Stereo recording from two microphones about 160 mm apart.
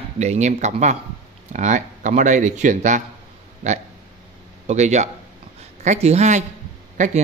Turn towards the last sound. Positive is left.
turn(degrees=-50)  # may be behind; listen again after turning